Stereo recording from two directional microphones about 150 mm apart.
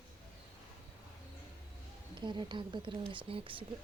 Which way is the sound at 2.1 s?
30° right (ahead or behind).